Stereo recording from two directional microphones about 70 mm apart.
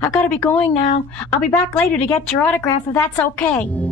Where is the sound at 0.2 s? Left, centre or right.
Centre.